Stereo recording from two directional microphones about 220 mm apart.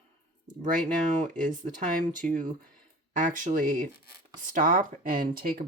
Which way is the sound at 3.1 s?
35° right (ahead or behind).